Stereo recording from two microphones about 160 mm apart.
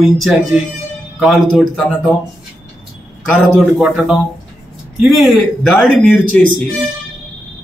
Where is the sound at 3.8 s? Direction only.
5° right (ahead or behind).